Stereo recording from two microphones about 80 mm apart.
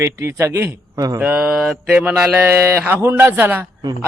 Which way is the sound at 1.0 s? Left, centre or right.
Right.